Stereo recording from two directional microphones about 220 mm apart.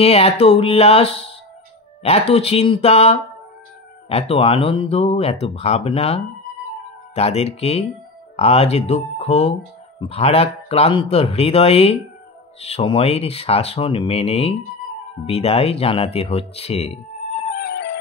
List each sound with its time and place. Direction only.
0.0 s speech: 25° left (ahead or behind)
17.6 s music: 50° left (ahead or behind)